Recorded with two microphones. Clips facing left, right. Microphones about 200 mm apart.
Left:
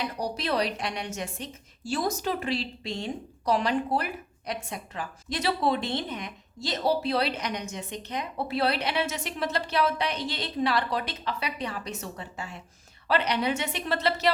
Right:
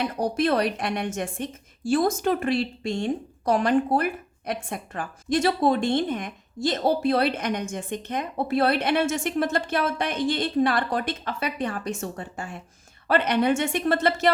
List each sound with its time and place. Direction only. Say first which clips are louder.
0.0 s a woman's voice: right 7 dB; 50° right (ahead or behind)